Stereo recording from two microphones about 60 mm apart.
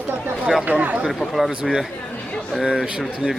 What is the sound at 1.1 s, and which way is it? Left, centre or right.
Speech, centre.